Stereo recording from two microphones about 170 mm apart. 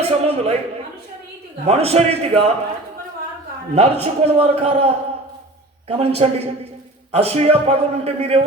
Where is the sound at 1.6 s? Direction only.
35° right (ahead or behind).